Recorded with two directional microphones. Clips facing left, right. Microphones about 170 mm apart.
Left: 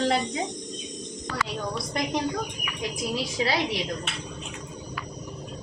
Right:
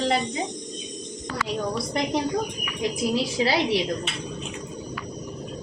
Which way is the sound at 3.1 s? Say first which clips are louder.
Right 2 dB; 30° right (ahead or behind).